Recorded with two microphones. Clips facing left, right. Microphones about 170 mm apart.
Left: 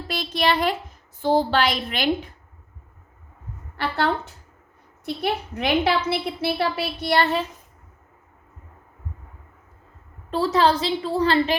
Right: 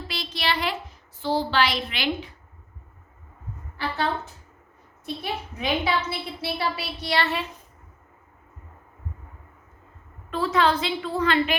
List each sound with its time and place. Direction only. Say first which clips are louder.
0.1 s a woman's voice: left 6 dB; 50° left (ahead or behind)
3.8 s a woman's voice: left 4 dB; 70° left (ahead or behind); by 7.4 s 45° left (ahead or behind)
10.2 s a woman's voice: left 3 dB; 35° left (ahead or behind)